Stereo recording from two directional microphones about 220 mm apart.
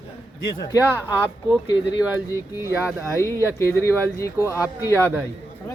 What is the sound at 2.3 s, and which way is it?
Speech, 15° left (ahead or behind).